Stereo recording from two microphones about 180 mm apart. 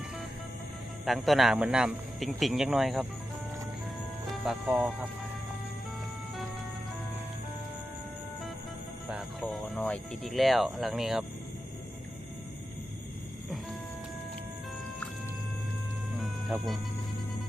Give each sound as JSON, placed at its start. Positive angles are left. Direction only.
{"t": 1.0, "sound": "speech", "side_deg": 0}
{"t": 4.4, "sound": "speech", "side_deg": -10}
{"t": 9.0, "sound": "speech", "side_deg": -5}
{"t": 9.7, "sound": "speech", "side_deg": 5}
{"t": 16.1, "sound": "music", "side_deg": 0}